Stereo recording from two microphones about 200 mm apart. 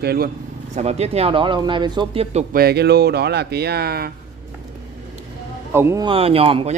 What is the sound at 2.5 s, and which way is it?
Speech, 50° right (ahead or behind).